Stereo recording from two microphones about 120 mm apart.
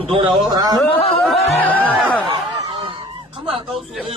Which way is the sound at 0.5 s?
35° right (ahead or behind).